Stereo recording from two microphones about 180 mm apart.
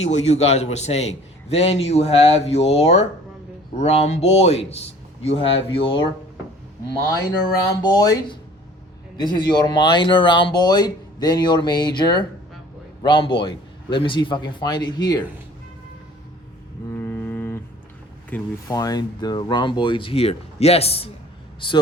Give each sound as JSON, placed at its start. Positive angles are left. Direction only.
{"t": 0.0, "sound": "a man's voice", "side_deg": 35}
{"t": 7.1, "sound": "speech", "side_deg": 20}
{"t": 16.9, "sound": "music", "side_deg": 10}
{"t": 18.3, "sound": "speech", "side_deg": 10}
{"t": 18.7, "sound": "speech", "side_deg": 20}